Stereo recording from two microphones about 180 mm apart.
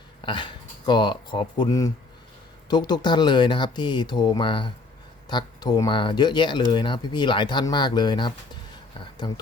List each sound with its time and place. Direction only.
0.2 s speech: 25° left (ahead or behind)